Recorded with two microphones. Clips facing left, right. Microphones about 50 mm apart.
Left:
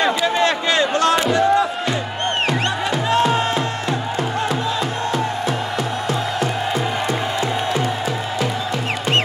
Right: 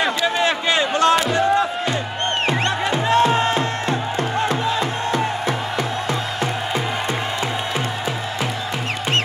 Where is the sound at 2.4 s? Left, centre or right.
Right.